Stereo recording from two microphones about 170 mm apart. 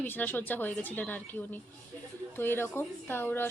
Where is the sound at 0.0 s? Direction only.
10° left (ahead or behind).